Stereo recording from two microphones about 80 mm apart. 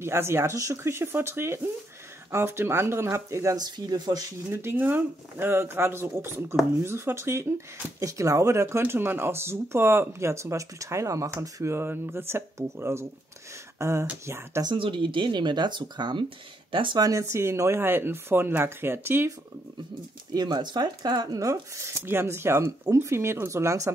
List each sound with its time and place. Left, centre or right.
0.0 s speech: right
3.5 s speech: right
4.5 s speech: right
14.6 s speech: right
16.7 s speech: right
17.0 s speech: right
20.3 s speech: right